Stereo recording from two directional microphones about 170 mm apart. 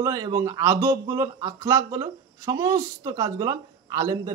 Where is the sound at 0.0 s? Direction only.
20° right (ahead or behind).